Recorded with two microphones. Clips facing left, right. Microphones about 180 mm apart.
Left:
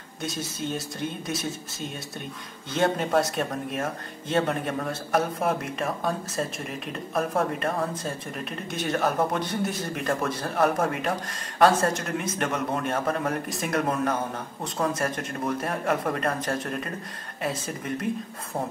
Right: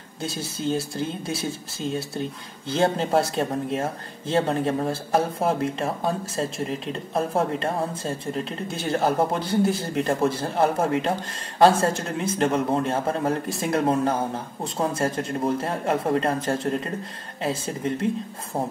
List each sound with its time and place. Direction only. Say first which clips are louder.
0.2 s speech: right 3 dB; 30° right (ahead or behind)